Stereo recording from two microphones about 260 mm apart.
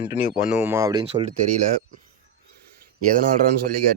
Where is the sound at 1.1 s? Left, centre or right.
Right.